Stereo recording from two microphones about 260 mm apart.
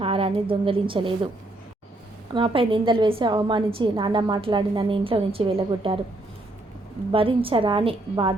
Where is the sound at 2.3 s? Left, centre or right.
Centre.